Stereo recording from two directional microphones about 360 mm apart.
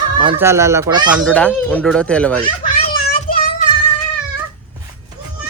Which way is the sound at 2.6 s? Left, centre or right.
Centre.